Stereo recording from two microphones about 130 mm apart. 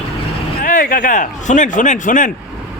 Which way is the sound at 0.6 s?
90° left.